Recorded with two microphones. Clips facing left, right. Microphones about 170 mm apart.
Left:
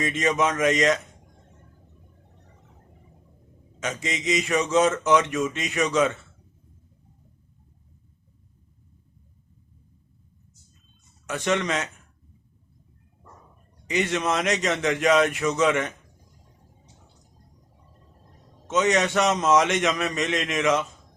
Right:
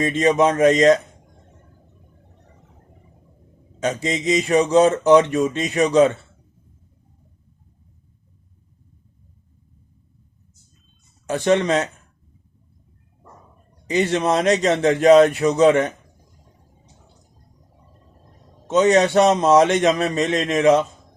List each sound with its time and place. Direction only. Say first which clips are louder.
0.0 s speech: right 7 dB; 35° right (ahead or behind)
3.8 s speech: right 7 dB; 35° right (ahead or behind)
11.3 s speech: right 7 dB; 35° right (ahead or behind)
13.8 s speech: right 5 dB; 35° right (ahead or behind)
18.7 s speech: right 7 dB; 35° right (ahead or behind)